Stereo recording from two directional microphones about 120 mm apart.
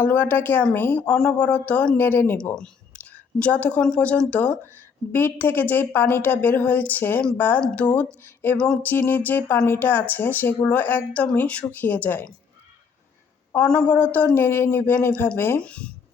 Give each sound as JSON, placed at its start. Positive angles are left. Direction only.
{"t": 0.0, "sound": "speech", "side_deg": 15}
{"t": 13.6, "sound": "speech", "side_deg": 10}